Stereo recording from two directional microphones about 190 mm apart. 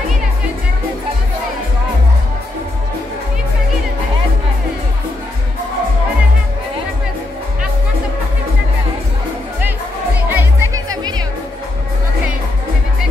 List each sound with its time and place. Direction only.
10.3 s music: 15° right (ahead or behind)